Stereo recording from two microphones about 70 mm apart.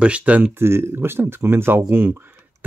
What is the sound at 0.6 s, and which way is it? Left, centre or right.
Speech, right.